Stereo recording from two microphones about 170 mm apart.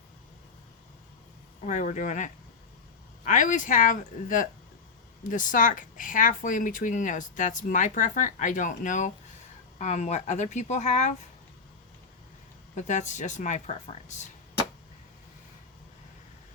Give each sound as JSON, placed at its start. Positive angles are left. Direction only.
{"t": 1.6, "sound": "speech", "side_deg": 45}
{"t": 12.7, "sound": "speech", "side_deg": 45}